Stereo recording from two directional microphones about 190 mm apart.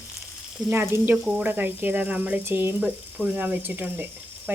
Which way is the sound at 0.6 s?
10° right (ahead or behind).